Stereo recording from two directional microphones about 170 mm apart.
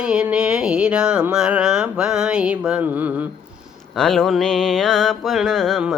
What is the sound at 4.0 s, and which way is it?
Mantra, centre (ahead or behind).